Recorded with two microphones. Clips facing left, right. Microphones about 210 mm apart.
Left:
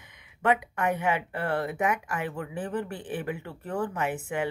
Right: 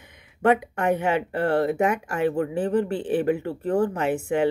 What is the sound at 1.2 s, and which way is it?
Speech, 45° right (ahead or behind).